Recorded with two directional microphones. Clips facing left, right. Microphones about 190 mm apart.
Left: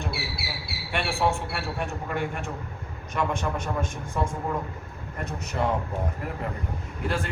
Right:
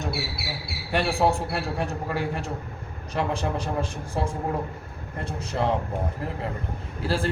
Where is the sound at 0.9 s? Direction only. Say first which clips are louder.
Right 3 dB; 35° right (ahead or behind).